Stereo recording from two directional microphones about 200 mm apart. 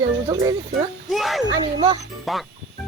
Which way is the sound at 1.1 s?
Centre (ahead or behind).